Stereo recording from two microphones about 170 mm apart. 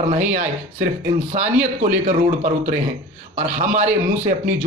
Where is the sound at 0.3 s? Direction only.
45° right (ahead or behind).